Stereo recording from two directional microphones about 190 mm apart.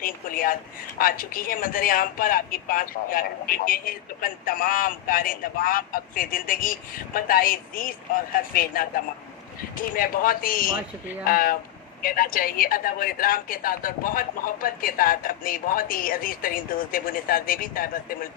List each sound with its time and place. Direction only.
0.0 s speech: 50° left (ahead or behind)